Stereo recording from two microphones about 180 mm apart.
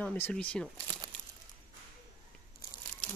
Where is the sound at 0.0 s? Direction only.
5° left (ahead or behind).